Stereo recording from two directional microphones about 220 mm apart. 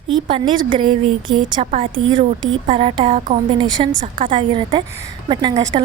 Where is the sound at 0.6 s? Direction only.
20° right (ahead or behind).